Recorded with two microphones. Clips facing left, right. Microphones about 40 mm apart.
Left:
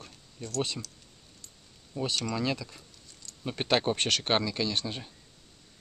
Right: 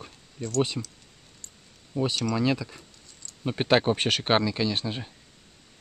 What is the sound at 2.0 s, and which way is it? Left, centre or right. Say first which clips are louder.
Speech: right 5 dB; centre.